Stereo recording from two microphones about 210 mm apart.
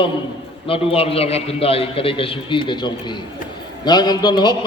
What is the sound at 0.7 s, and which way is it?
A man's voice, 25° left (ahead or behind).